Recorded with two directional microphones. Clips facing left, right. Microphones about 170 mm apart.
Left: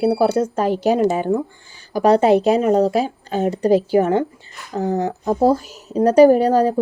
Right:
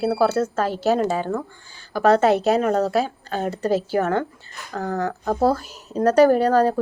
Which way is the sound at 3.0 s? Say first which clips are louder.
Left 3 dB; 15° left (ahead or behind).